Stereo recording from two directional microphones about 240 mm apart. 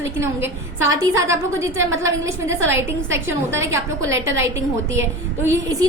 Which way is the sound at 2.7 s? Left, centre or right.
Right.